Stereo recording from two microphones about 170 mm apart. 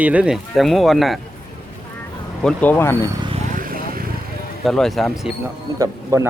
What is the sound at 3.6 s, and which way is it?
Vehicle, 55° right (ahead or behind).